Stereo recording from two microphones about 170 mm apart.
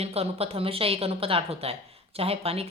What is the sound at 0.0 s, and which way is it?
Speech, 35° right (ahead or behind).